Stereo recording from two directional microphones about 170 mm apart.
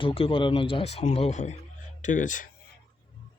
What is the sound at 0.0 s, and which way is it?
Speech, 35° left (ahead or behind).